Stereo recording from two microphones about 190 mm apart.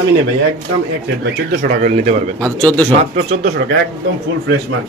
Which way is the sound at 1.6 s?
45° right (ahead or behind).